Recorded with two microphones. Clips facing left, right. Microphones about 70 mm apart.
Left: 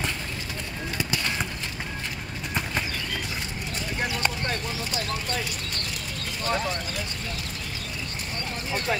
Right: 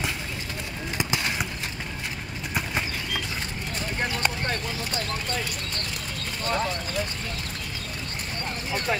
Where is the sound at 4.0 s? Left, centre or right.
Centre.